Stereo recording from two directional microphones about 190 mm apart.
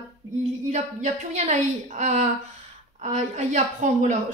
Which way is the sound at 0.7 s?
40° right (ahead or behind).